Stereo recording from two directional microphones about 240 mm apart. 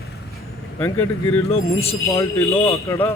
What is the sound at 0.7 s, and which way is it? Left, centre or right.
Speech, centre.